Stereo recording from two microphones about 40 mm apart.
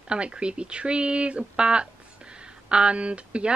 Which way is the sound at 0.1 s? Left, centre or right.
Right.